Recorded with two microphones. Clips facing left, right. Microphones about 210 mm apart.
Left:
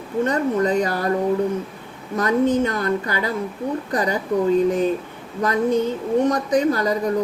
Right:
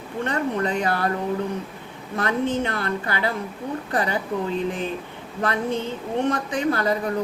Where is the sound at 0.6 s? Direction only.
40° left (ahead or behind).